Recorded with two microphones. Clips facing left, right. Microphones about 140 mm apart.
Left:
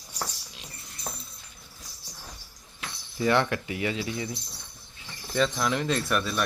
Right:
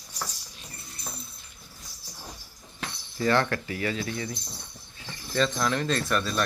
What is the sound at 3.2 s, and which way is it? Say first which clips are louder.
Speech: even; 15° left (ahead or behind).